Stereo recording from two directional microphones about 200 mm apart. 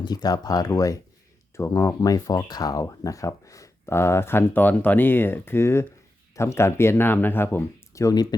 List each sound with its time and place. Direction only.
0.0 s speech: 20° left (ahead or behind)